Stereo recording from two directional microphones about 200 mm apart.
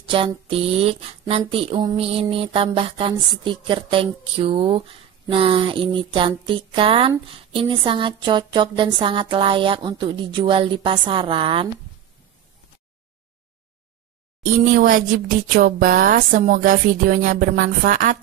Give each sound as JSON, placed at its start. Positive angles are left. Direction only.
{"t": 0.1, "sound": "speech", "side_deg": -25}
{"t": 14.4, "sound": "speech", "side_deg": -45}